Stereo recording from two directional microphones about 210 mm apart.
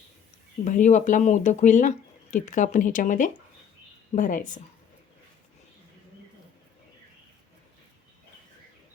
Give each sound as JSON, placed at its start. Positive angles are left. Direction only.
{"t": 0.6, "sound": "speech", "side_deg": 35}